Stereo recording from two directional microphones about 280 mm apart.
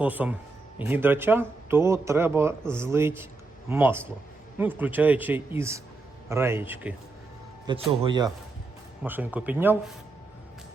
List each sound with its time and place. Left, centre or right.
0.0 s speech: centre